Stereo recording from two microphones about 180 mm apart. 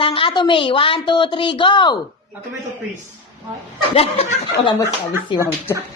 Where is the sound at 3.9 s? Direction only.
30° left (ahead or behind).